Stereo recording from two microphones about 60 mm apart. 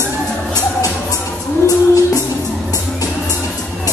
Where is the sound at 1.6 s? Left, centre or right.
Left.